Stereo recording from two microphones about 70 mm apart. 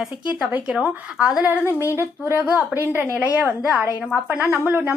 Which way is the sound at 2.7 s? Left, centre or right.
Right.